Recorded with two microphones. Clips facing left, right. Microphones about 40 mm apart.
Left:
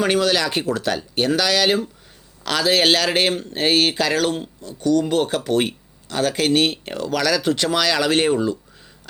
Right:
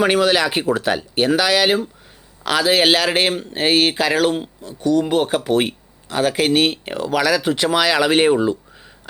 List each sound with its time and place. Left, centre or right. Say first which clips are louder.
0.0 s a man's voice: right 3 dB; centre